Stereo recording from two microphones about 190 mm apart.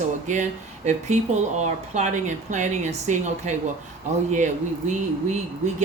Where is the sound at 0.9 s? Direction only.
40° right (ahead or behind).